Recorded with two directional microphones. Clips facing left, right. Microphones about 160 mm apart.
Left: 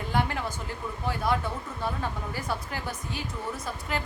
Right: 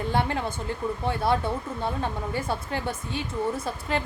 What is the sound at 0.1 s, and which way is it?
A woman's voice, 25° right (ahead or behind).